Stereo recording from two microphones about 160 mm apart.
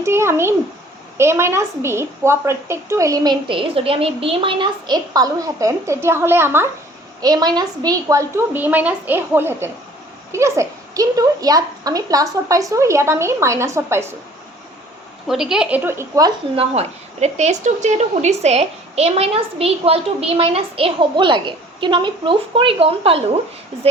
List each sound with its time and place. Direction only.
0.0 s a woman's voice: 15° right (ahead or behind)
15.3 s a woman's voice: 5° right (ahead or behind); by 16.3 s 20° right (ahead or behind)
16.6 s a woman's voice: 40° right (ahead or behind)